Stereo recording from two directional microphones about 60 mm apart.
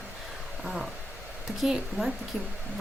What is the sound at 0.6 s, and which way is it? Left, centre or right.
Speech, centre.